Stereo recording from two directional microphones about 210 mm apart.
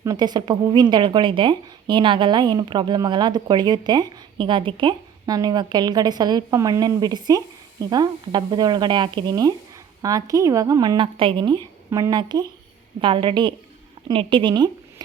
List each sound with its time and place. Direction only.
0.0 s a woman's voice: 20° right (ahead or behind)